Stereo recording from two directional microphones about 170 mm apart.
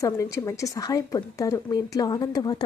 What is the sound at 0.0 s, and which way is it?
A woman's voice, 20° left (ahead or behind).